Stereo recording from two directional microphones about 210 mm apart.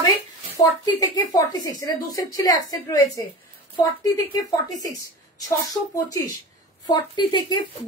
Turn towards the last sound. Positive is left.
turn(degrees=20)  # may be behind; listen again after turning